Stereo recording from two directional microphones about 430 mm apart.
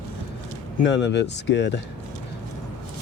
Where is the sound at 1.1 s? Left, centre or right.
Left.